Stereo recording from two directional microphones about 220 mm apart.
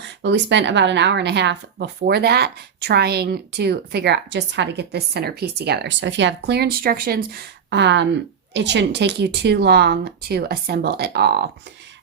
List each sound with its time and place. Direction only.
0.2 s speech: 50° right (ahead or behind)